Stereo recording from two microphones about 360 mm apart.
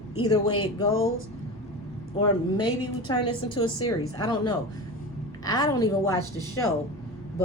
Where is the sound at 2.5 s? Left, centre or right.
Centre.